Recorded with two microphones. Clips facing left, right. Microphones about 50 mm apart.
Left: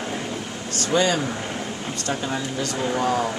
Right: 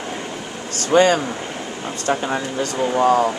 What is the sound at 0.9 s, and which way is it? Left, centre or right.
Speech, right.